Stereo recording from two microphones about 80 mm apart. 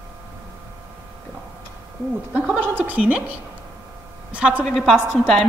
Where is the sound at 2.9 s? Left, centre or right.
Centre.